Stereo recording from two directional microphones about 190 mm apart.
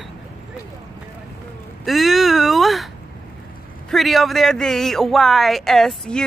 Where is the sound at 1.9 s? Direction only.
Centre (ahead or behind).